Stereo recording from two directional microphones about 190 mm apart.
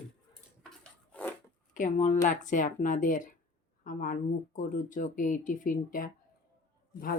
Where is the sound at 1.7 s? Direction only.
40° left (ahead or behind).